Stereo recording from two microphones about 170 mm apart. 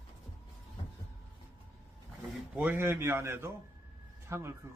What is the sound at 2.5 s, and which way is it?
Speech, 10° right (ahead or behind).